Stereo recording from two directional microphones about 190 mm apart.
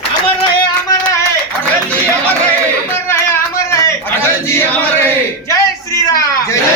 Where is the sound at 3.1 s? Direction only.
15° left (ahead or behind).